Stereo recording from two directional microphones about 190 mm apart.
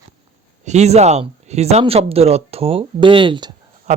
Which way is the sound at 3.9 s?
35° right (ahead or behind).